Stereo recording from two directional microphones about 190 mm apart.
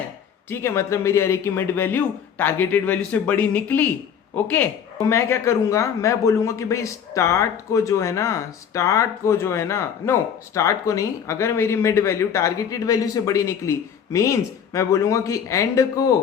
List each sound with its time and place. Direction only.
0.5 s speech: 15° left (ahead or behind)